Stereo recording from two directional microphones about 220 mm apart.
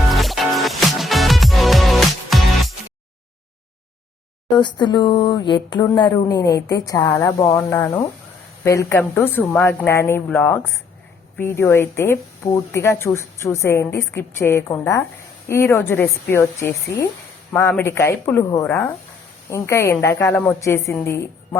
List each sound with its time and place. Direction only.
0.1 s music: centre (ahead or behind)
4.5 s a woman's voice: 20° left (ahead or behind)